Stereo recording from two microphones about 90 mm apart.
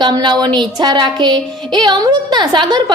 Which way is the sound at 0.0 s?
55° right (ahead or behind).